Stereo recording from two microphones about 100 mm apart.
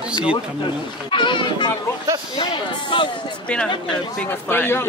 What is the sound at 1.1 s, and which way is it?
Speech, 55° left (ahead or behind).